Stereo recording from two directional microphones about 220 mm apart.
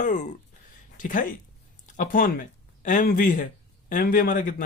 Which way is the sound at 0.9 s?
35° left (ahead or behind).